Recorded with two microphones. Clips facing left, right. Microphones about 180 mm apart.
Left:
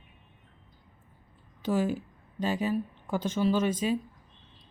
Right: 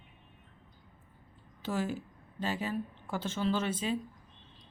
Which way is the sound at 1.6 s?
10° left (ahead or behind).